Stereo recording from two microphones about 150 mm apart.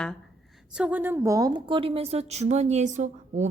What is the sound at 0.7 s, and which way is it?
A woman's voice, 10° right (ahead or behind).